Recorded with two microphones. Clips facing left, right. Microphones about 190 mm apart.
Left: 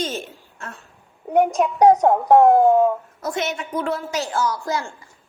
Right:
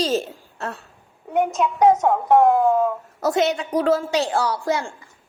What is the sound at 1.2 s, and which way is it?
Speech, 40° left (ahead or behind).